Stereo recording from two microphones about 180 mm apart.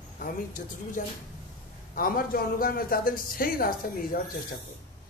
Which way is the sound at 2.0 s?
55° left (ahead or behind).